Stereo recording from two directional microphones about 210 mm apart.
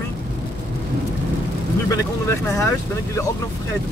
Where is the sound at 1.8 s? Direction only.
15° left (ahead or behind).